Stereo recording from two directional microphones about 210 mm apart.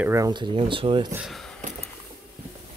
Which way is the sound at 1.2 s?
Centre (ahead or behind).